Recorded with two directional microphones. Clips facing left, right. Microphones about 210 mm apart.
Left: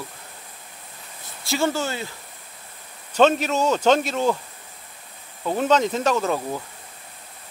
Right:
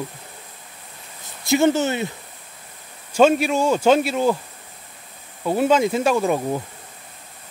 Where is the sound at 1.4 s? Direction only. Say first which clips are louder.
Right 6 dB; 20° right (ahead or behind).